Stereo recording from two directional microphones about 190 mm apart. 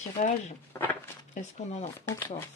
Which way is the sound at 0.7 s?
10° left (ahead or behind).